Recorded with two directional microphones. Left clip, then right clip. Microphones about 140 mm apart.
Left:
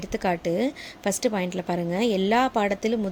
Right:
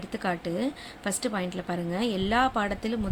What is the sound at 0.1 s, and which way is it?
Speech, 45° left (ahead or behind).